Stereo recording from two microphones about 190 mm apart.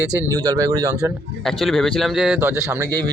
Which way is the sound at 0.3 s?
20° right (ahead or behind).